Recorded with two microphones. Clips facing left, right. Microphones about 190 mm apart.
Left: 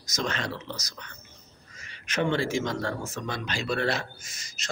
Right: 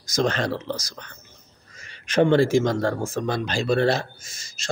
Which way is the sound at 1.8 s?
30° right (ahead or behind).